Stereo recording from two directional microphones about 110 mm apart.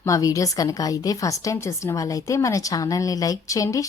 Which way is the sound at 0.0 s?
30° left (ahead or behind).